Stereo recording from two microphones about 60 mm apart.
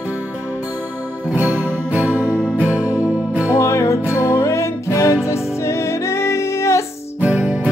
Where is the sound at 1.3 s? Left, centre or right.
Right.